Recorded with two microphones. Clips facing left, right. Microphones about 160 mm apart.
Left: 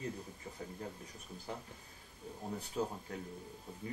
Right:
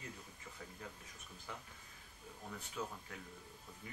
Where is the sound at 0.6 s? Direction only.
35° left (ahead or behind).